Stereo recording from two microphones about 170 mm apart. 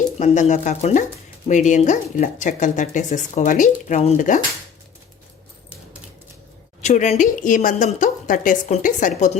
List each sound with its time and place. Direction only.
0.2 s speech: 45° left (ahead or behind)
6.8 s speech: 45° left (ahead or behind)